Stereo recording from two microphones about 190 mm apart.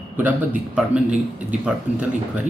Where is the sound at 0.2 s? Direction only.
10° right (ahead or behind).